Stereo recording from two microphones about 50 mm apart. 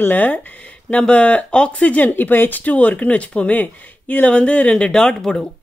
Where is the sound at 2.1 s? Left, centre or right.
Left; by 5.4 s centre.